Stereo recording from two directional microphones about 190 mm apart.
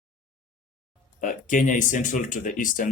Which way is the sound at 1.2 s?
45° left (ahead or behind).